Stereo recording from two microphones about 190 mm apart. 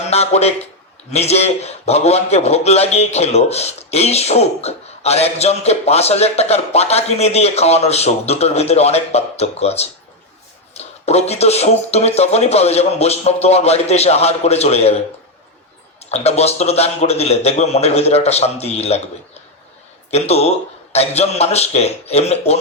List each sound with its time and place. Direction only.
0.1 s a man's voice: 35° left (ahead or behind)
16.0 s a man's voice: 35° left (ahead or behind)
20.1 s a man's voice: 35° left (ahead or behind)